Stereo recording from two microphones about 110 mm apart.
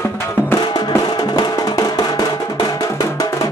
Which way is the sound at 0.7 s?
40° left (ahead or behind).